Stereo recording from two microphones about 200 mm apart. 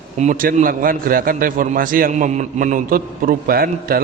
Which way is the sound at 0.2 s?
40° right (ahead or behind).